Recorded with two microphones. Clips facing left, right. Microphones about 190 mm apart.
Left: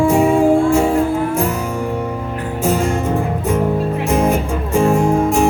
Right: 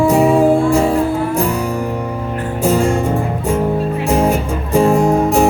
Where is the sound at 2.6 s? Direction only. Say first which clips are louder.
Right 3 dB; 35° right (ahead or behind).